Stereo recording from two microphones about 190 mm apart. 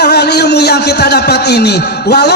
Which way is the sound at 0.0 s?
60° left (ahead or behind).